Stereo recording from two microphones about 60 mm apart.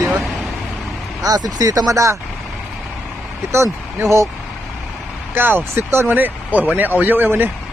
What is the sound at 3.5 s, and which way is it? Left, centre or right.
Speech, right.